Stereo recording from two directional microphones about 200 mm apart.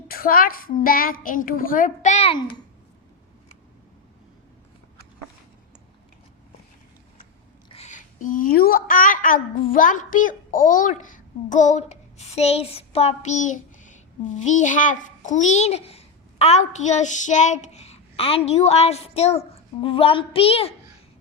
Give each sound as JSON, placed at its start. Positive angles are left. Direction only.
{"t": 0.1, "sound": "a woman's voice", "side_deg": 45}
{"t": 7.7, "sound": "a woman's voice", "side_deg": 35}